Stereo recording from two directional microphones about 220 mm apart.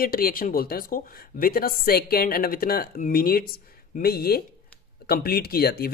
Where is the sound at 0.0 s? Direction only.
40° left (ahead or behind).